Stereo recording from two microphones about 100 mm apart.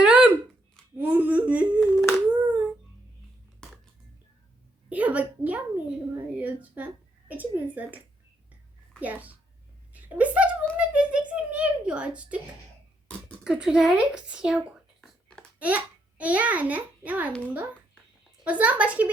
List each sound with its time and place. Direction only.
0.0 s a sound: 10° right (ahead or behind)
0.9 s whimper: 20° right (ahead or behind)
1.8 s humming: 5° left (ahead or behind)
2.3 s humming: 15° right (ahead or behind)
4.9 s a woman's voice: 15° right (ahead or behind)
13.4 s a child's voice: 10° right (ahead or behind)
18.4 s a child's voice: 15° right (ahead or behind)